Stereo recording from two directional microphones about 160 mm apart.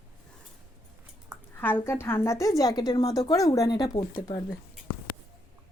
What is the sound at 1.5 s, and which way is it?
A woman's voice, 10° left (ahead or behind).